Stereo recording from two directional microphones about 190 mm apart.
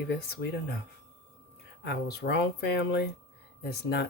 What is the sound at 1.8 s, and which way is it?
Speech, 55° left (ahead or behind).